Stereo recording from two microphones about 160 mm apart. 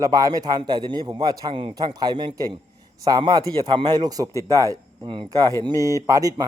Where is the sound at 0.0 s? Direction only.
25° right (ahead or behind).